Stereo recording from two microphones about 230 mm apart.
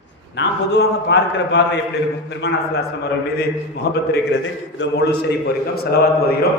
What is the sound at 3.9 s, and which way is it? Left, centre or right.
A man's voice, left.